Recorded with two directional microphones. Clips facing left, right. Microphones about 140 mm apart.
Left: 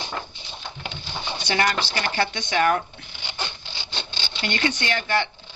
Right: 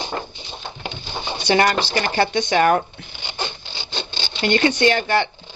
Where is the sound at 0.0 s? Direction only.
30° right (ahead or behind).